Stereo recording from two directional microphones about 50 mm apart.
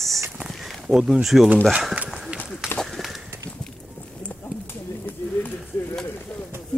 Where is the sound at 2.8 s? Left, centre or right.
Centre.